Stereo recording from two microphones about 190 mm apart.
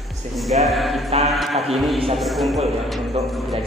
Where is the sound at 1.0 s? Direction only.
35° right (ahead or behind).